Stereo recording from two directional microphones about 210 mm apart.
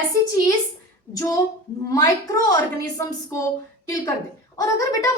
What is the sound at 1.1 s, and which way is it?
A woman's voice, 15° left (ahead or behind).